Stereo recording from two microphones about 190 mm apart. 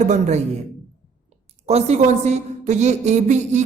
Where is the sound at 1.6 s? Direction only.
35° right (ahead or behind).